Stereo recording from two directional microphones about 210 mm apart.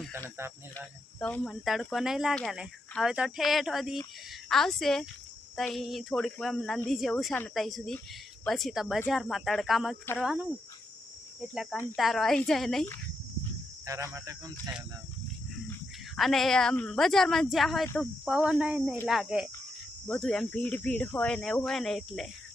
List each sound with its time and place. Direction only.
1.2 s speech: 5° left (ahead or behind)
11.5 s speech: centre (ahead or behind)
13.8 s speech: 15° right (ahead or behind)
16.1 s speech: centre (ahead or behind)